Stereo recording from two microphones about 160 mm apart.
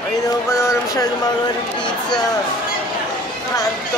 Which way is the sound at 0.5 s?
20° left (ahead or behind).